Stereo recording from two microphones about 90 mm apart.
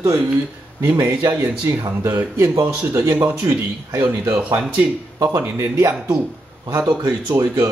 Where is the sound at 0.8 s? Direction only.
30° right (ahead or behind).